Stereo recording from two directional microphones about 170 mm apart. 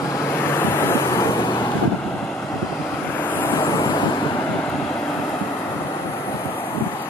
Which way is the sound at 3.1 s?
10° left (ahead or behind).